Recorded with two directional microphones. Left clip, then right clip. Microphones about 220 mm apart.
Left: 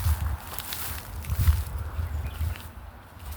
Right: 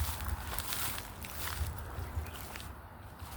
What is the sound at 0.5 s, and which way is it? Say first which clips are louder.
Walk: left 2 dB; centre (ahead or behind).